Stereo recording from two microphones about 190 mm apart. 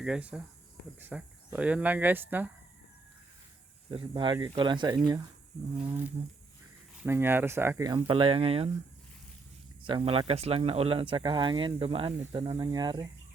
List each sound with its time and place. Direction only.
0.0 s speech: 5° right (ahead or behind)
3.9 s speech: 25° right (ahead or behind)
5.7 s speech: 10° right (ahead or behind); by 8.7 s 30° right (ahead or behind)
9.8 s speech: 30° right (ahead or behind)